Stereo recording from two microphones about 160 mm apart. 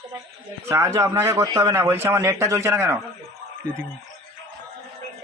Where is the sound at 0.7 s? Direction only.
20° right (ahead or behind).